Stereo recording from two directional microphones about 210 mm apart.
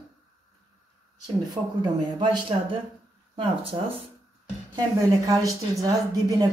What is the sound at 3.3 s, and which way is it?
Speech, 25° right (ahead or behind).